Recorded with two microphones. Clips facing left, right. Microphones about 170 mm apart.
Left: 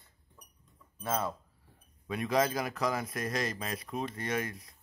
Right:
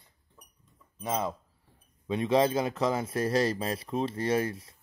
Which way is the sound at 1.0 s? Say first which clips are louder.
Right 2 dB; 15° right (ahead or behind).